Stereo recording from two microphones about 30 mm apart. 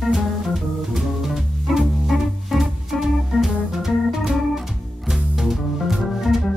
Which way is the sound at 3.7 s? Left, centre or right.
Centre.